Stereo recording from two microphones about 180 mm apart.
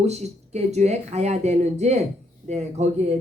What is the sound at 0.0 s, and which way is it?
Speech, 40° right (ahead or behind).